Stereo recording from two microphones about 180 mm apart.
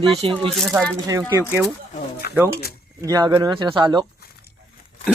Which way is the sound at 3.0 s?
20° right (ahead or behind).